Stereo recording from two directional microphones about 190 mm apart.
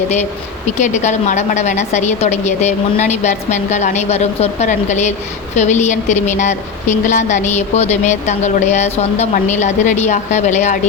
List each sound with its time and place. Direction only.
0.8 s a woman's voice: 40° left (ahead or behind)